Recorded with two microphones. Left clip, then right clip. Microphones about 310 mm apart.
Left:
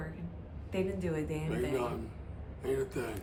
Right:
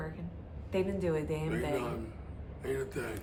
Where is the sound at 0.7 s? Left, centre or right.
Centre.